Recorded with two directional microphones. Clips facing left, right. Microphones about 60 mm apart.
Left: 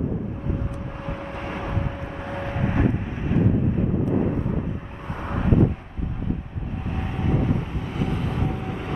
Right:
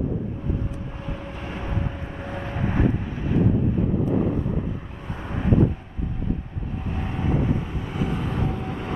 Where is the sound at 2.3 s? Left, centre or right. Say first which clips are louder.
Left 1 dB; centre.